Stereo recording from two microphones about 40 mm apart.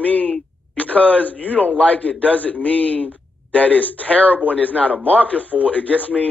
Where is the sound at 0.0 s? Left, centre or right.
Left.